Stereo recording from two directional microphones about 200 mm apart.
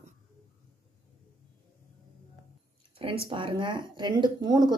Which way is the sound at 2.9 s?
25° right (ahead or behind).